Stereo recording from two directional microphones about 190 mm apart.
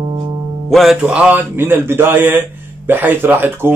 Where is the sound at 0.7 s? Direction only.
Centre (ahead or behind).